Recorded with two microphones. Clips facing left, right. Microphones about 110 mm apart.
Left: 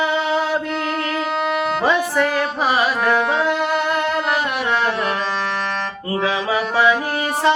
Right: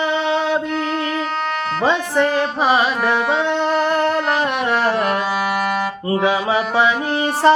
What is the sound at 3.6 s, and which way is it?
Music, 30° right (ahead or behind).